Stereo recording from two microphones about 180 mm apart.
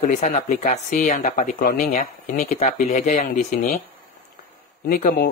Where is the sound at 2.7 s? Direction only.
40° left (ahead or behind).